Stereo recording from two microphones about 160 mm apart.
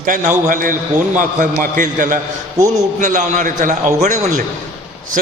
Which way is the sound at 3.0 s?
50° right (ahead or behind).